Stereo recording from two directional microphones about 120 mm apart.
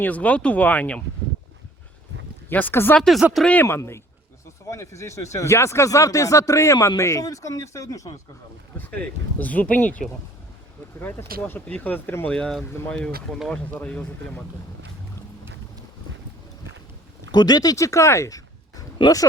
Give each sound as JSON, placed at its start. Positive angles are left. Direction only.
{"t": 0.0, "sound": "speech", "side_deg": 10}
{"t": 2.5, "sound": "speech", "side_deg": 15}
{"t": 3.0, "sound": "speech", "side_deg": 0}
{"t": 8.8, "sound": "speech", "side_deg": 15}
{"t": 17.3, "sound": "speech", "side_deg": 35}